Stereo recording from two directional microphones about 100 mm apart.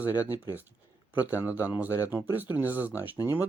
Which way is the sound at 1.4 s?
20° right (ahead or behind).